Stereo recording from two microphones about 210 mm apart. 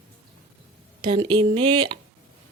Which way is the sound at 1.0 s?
20° right (ahead or behind).